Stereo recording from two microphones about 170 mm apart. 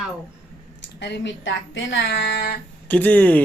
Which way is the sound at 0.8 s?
90° left.